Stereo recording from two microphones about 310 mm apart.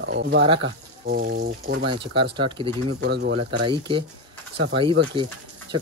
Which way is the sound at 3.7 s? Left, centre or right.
Centre.